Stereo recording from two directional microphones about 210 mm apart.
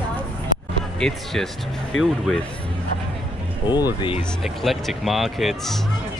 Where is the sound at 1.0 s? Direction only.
Centre (ahead or behind).